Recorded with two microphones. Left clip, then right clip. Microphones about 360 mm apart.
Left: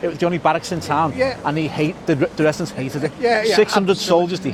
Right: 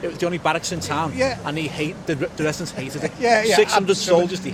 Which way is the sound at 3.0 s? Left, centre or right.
Right.